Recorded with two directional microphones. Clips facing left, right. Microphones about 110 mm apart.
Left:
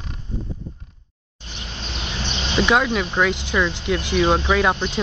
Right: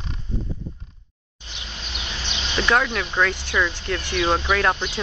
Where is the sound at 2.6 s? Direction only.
10° left (ahead or behind).